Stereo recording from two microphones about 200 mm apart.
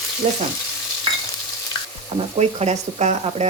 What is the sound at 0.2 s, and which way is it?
Speech, 35° right (ahead or behind).